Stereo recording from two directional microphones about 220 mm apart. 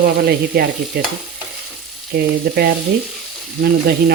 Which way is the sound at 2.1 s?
40° right (ahead or behind).